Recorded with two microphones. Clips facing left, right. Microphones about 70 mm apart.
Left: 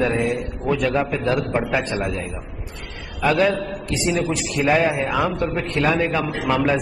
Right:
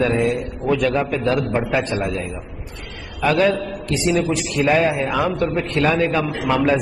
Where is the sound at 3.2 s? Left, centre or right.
Centre.